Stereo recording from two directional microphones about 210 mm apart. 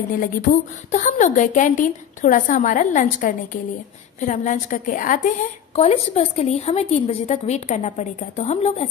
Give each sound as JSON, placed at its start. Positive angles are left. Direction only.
{"t": 0.2, "sound": "a woman's voice", "side_deg": 40}